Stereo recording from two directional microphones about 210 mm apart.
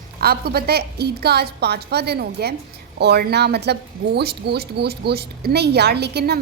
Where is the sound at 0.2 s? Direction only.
45° right (ahead or behind).